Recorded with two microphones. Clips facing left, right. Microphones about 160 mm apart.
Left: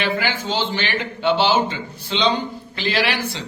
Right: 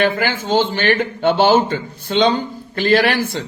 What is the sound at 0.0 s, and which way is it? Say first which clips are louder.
Speech: right 5 dB; 50° right (ahead or behind).